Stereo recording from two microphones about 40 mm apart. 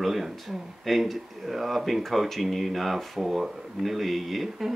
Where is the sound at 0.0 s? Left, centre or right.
Centre.